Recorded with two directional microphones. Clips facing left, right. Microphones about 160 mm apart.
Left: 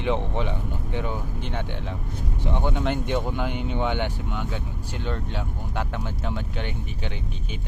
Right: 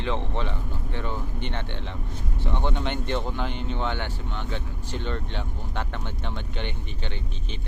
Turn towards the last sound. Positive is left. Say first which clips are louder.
# left 2 dB
turn(degrees=5)  # may be behind; listen again after turning